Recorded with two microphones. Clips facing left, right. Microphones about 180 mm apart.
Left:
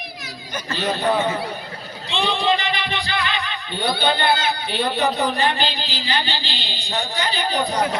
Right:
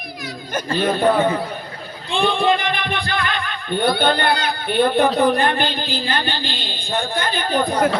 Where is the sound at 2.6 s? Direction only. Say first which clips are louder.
Right 2 dB; 50° right (ahead or behind).